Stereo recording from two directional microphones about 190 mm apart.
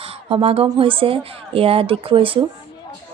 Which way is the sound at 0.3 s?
30° right (ahead or behind).